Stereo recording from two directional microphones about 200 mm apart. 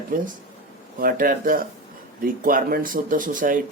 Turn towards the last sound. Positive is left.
turn(degrees=-40)  # may be behind; listen again after turning